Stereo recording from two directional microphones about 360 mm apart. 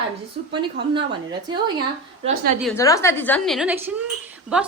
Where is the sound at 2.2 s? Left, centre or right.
Centre.